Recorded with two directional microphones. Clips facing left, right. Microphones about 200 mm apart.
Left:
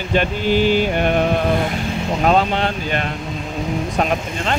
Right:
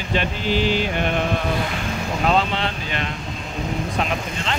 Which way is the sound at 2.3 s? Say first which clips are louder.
Left 4 dB; 45° left (ahead or behind).